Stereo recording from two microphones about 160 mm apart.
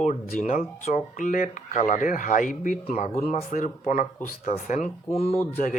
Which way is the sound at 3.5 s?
55° left (ahead or behind).